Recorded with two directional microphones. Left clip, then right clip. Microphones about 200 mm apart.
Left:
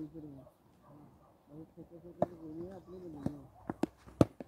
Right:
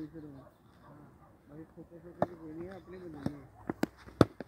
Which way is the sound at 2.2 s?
5° left (ahead or behind).